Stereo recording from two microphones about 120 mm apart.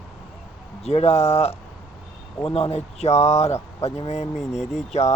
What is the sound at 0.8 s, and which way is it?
Speech, 60° left (ahead or behind).